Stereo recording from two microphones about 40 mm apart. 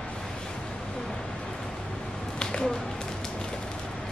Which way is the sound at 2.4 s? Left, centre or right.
Centre.